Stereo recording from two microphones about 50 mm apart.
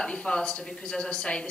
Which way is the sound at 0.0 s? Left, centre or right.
Centre.